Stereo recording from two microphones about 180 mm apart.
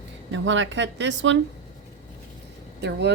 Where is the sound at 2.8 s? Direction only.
70° right (ahead or behind).